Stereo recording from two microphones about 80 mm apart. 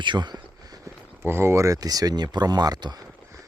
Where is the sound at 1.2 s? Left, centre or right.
Right.